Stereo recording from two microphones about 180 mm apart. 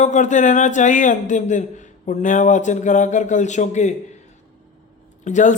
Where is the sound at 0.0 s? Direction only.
45° left (ahead or behind).